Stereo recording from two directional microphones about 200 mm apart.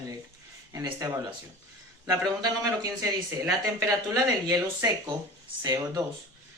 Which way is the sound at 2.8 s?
20° right (ahead or behind).